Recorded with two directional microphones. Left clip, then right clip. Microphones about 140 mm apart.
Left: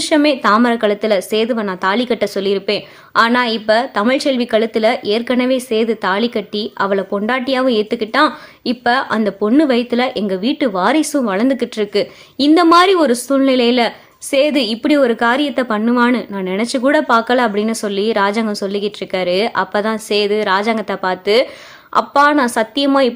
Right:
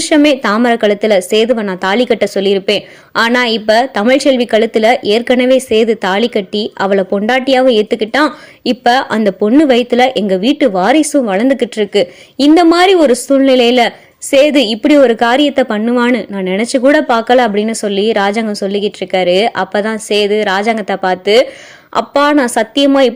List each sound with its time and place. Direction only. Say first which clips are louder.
0.0 s a woman's voice: right 3 dB; 15° right (ahead or behind)